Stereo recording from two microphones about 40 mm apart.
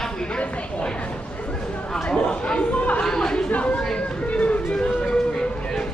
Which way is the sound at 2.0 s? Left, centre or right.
Left.